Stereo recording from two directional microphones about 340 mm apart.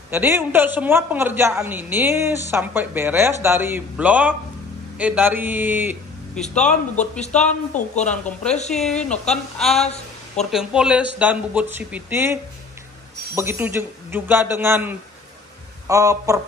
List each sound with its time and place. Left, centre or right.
0.1 s a man's voice: centre
7.7 s a woman's voice: left
8.6 s a man's voice: centre